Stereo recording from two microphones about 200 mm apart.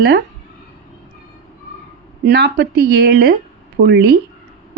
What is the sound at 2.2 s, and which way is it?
A woman's voice, 55° right (ahead or behind).